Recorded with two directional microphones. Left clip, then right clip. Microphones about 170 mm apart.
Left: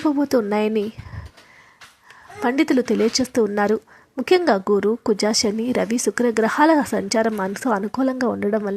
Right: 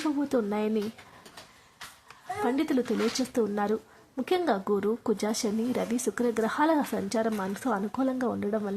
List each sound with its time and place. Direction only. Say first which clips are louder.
0.2 s speech: left 9 dB; 35° left (ahead or behind)
2.4 s speech: left 9 dB; 30° left (ahead or behind)